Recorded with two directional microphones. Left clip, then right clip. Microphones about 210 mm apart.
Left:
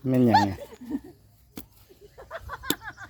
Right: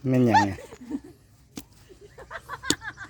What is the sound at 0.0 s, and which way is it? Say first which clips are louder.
Speech: even; 10° right (ahead or behind).